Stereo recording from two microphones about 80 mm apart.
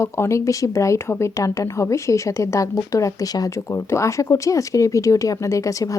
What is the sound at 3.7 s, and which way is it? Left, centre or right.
Speech, left.